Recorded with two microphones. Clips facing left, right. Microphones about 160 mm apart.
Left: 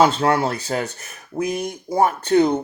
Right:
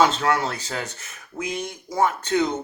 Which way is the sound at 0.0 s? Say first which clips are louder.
Left 4 dB; 30° left (ahead or behind).